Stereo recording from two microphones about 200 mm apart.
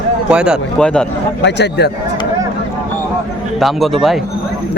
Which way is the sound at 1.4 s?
60° left (ahead or behind).